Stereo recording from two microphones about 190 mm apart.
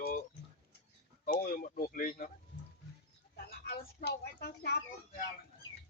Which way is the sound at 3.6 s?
60° left (ahead or behind).